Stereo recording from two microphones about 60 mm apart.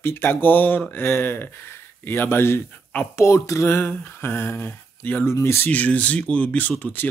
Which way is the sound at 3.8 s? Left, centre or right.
Left.